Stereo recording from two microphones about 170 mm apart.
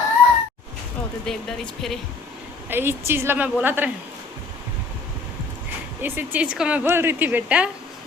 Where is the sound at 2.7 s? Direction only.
15° right (ahead or behind).